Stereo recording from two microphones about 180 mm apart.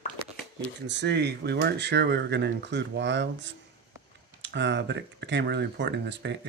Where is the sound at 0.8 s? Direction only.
75° right (ahead or behind).